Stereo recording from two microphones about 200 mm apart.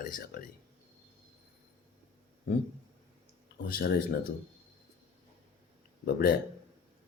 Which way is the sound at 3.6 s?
50° left (ahead or behind).